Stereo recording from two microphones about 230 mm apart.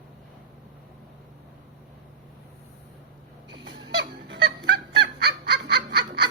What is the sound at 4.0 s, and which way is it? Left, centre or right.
Honk, right.